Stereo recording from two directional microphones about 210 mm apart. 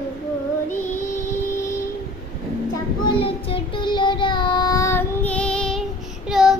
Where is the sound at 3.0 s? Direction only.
25° left (ahead or behind); by 6.6 s centre (ahead or behind).